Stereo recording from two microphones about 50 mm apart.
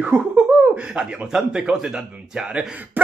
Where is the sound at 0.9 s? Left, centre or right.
Centre.